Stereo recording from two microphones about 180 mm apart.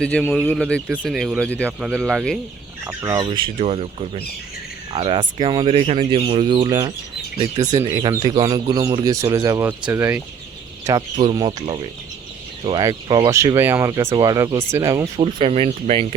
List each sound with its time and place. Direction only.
0.0 s speech: 5° left (ahead or behind)
2.8 s speech: 15° right (ahead or behind)
10.8 s speech: 20° right (ahead or behind)
12.8 s speech: 20° right (ahead or behind)
15.2 s speech: 30° right (ahead or behind)